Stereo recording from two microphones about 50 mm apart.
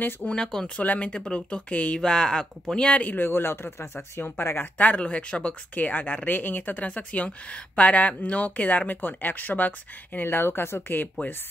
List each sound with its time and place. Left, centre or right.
0.2 s speech: centre
2.0 s speech: centre
3.2 s speech: left
4.7 s speech: left